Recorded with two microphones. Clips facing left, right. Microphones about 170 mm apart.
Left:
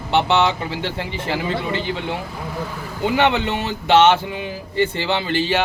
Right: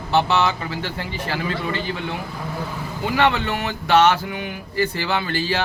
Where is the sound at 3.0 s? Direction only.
25° left (ahead or behind).